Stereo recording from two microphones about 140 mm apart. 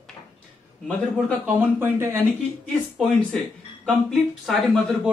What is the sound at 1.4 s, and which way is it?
Speech, 15° right (ahead or behind).